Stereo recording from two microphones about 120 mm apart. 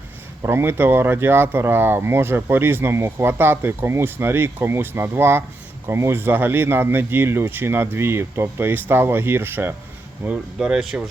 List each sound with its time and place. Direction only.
0.4 s speech: 20° right (ahead or behind)
10.2 s speech: 5° right (ahead or behind)